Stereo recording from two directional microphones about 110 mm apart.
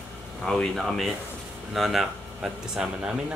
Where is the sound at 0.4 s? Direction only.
5° left (ahead or behind).